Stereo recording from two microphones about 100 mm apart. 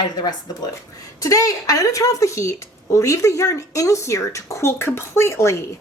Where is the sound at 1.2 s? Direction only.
35° left (ahead or behind).